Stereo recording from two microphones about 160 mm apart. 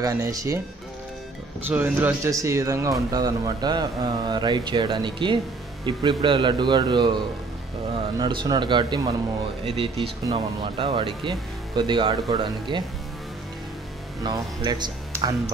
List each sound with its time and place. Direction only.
0.0 s speech: 20° right (ahead or behind)
1.7 s speech: 10° right (ahead or behind); by 7.2 s 30° right (ahead or behind)
8.2 s speech: 30° right (ahead or behind)
14.2 s speech: 25° right (ahead or behind)